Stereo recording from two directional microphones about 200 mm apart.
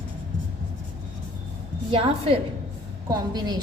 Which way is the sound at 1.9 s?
25° right (ahead or behind).